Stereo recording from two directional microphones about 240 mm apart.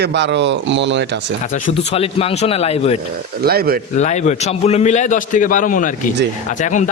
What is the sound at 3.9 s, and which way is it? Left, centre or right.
A man's voice, left.